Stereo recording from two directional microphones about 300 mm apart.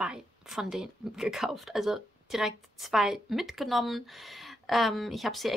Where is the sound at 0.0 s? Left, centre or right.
Centre.